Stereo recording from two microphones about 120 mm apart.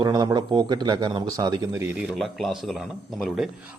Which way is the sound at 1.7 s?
20° right (ahead or behind).